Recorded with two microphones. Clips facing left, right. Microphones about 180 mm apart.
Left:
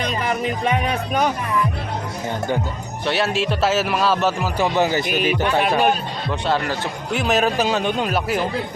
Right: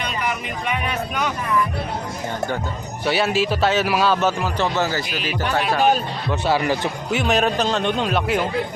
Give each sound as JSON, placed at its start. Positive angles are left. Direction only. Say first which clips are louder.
{"t": 0.0, "sound": "speech", "louder": "left 4 dB", "side_deg": 40}
{"t": 3.1, "sound": "speech", "louder": "right 1 dB", "side_deg": 0}
{"t": 4.6, "sound": "speech", "louder": "left 4 dB", "side_deg": 15}
{"t": 5.4, "sound": "speech", "louder": "right 2 dB", "side_deg": 55}
{"t": 6.5, "sound": "speech", "louder": "right 2 dB", "side_deg": -15}
{"t": 7.1, "sound": "speech", "louder": "left 1 dB", "side_deg": 0}